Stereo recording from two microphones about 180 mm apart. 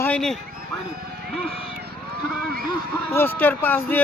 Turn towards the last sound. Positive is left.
turn(degrees=10)  # may be behind; listen again after turning